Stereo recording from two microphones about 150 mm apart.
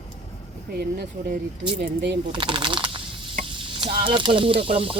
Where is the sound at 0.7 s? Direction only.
90° right.